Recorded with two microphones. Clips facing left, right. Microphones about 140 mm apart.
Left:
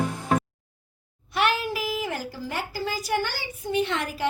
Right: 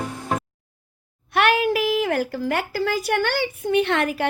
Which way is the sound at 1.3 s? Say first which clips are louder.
Right 6 dB; 60° right (ahead or behind).